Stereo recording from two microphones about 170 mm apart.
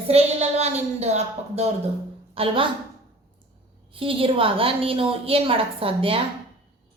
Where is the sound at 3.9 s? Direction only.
30° right (ahead or behind).